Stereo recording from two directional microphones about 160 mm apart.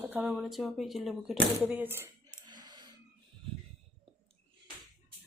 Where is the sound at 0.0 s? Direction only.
10° right (ahead or behind).